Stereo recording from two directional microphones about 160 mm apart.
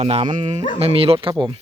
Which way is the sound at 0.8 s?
35° right (ahead or behind).